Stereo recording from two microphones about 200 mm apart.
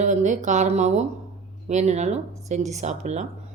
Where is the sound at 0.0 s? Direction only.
35° right (ahead or behind).